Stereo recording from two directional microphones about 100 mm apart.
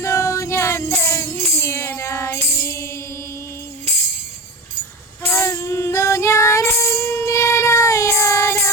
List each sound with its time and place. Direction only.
0.0 s music: 30° left (ahead or behind)
5.3 s child singing: 25° left (ahead or behind)